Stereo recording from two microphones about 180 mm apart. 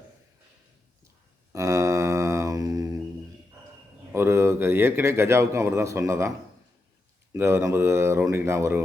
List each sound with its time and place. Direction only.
1.5 s mantra: 15° right (ahead or behind)
4.1 s a man's voice: 15° right (ahead or behind)
7.3 s a man's voice: 15° right (ahead or behind)